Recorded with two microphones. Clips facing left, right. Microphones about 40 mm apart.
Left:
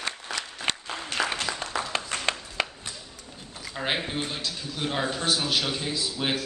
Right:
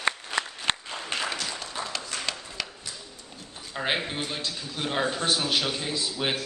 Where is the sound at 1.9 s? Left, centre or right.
Left.